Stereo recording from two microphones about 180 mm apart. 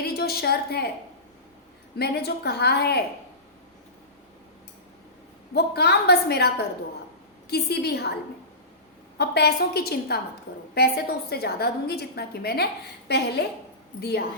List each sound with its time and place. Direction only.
0.0 s a woman's voice: 60° left (ahead or behind)
2.0 s a woman's voice: 65° left (ahead or behind)
5.5 s a woman's voice: 65° left (ahead or behind)
7.5 s a woman's voice: 65° left (ahead or behind)
9.1 s a woman's voice: 65° left (ahead or behind)